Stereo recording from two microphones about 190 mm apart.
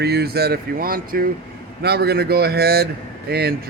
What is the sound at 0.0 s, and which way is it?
Speech, 60° right (ahead or behind).